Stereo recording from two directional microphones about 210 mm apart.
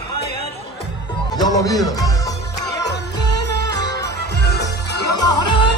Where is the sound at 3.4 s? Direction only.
55° left (ahead or behind).